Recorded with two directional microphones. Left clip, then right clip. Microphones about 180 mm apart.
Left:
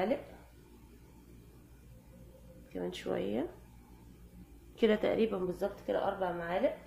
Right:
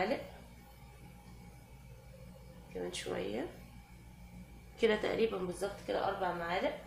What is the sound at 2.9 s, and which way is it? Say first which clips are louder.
Speech: left 4 dB; 50° left (ahead or behind).